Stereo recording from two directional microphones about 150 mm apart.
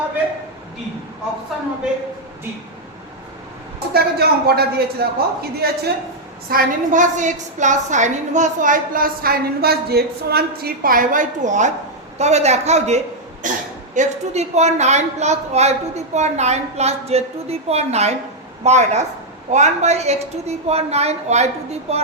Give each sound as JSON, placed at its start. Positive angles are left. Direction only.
{"t": 3.9, "sound": "speech", "side_deg": -90}
{"t": 6.5, "sound": "a woman's voice", "side_deg": -65}
{"t": 13.4, "sound": "a woman's voice", "side_deg": -60}
{"t": 13.9, "sound": "a woman's voice", "side_deg": -50}